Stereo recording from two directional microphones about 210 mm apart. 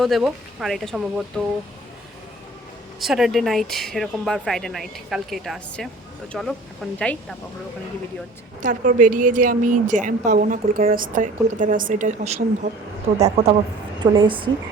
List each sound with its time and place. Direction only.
0.0 s speech: centre (ahead or behind)
3.0 s speech: centre (ahead or behind)
8.6 s a woman's voice: 40° right (ahead or behind); by 14.5 s 25° right (ahead or behind)